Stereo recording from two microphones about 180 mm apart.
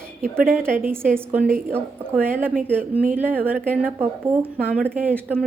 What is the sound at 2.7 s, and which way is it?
A woman's voice, 10° right (ahead or behind).